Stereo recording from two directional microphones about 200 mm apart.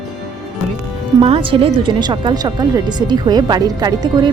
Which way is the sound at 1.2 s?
25° right (ahead or behind).